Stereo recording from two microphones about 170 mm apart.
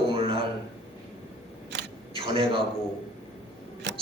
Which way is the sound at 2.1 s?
30° right (ahead or behind).